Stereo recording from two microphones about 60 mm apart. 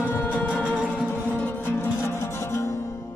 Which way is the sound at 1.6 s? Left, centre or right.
Left.